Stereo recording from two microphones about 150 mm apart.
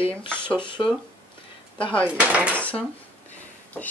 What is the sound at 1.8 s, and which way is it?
Speech, 10° left (ahead or behind).